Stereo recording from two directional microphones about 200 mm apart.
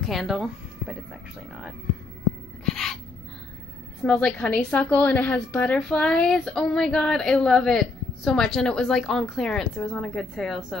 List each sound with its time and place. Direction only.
0.0 s speech: centre (ahead or behind)
2.6 s music: centre (ahead or behind)
4.0 s a woman's voice: 5° left (ahead or behind)